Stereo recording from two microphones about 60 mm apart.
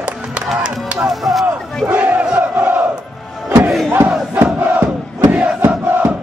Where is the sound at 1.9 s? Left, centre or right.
Centre.